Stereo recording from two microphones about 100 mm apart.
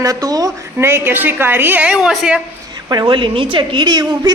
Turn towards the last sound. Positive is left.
turn(degrees=-45)  # may be behind; listen again after turning